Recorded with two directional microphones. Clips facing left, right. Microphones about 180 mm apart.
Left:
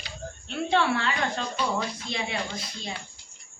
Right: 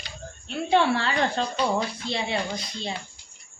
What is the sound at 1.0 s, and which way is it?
A woman's voice, 35° right (ahead or behind).